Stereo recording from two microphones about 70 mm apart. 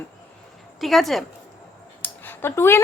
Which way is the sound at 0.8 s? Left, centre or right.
Centre.